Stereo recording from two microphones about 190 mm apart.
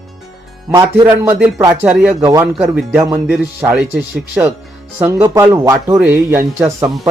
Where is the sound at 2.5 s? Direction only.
5° right (ahead or behind).